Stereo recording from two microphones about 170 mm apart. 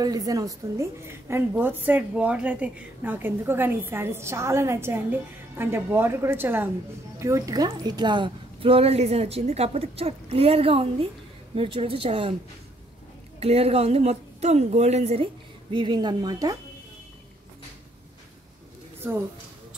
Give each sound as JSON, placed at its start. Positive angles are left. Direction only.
{"t": 0.0, "sound": "a woman's voice", "side_deg": -20}
{"t": 13.4, "sound": "a woman's voice", "side_deg": -35}
{"t": 15.7, "sound": "speech", "side_deg": -25}